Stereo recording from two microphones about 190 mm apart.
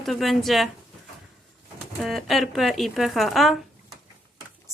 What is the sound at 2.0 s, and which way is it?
Speech, centre (ahead or behind).